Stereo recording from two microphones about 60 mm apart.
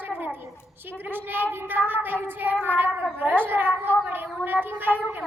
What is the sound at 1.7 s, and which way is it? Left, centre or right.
A woman's voice, right.